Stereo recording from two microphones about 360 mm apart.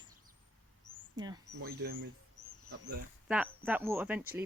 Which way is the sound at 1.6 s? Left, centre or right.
Right.